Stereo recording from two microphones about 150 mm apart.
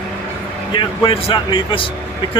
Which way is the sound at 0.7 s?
35° left (ahead or behind).